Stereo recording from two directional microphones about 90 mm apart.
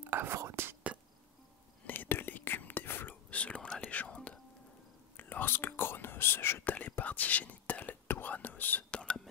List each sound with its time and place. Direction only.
0.0 s whispering: 25° right (ahead or behind)
1.9 s whispering: 25° left (ahead or behind); by 9.3 s 5° left (ahead or behind)